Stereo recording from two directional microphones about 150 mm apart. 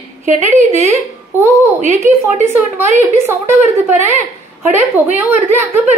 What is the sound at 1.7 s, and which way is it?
Speech, 50° right (ahead or behind).